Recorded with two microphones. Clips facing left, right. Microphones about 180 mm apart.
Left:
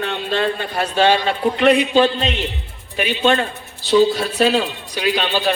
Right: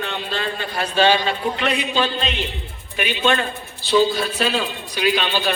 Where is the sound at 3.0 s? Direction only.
35° left (ahead or behind).